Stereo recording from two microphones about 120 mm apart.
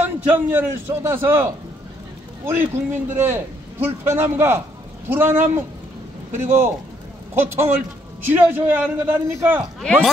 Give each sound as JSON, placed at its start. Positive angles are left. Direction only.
{"t": 0.0, "sound": "a man's voice", "side_deg": -15}